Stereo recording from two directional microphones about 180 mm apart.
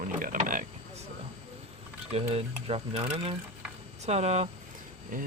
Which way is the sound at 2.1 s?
35° right (ahead or behind).